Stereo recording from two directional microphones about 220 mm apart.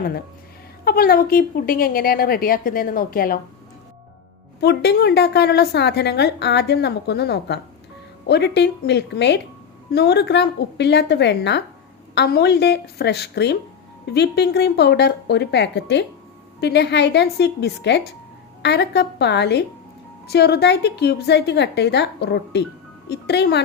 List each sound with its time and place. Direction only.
0.9 s a woman's voice: 45° left (ahead or behind)
4.6 s a woman's voice: 50° left (ahead or behind)